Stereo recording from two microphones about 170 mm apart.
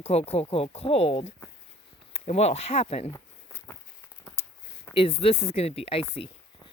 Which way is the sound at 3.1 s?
15° left (ahead or behind).